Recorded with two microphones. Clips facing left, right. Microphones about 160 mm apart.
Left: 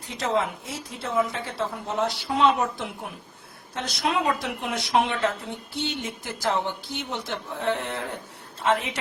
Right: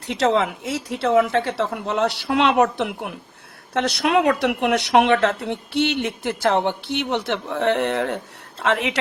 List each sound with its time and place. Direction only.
0.0 s a woman's voice: 85° right